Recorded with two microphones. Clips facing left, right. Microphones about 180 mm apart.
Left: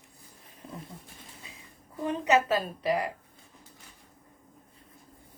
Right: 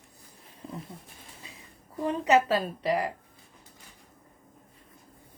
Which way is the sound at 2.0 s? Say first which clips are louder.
Right 2 dB; 30° right (ahead or behind).